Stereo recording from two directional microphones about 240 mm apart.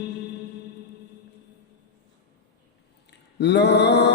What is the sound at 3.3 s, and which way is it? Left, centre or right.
Mantra, left.